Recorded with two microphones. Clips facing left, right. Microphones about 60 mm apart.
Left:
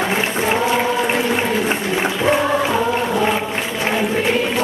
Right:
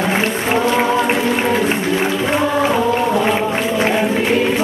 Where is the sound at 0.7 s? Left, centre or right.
Right.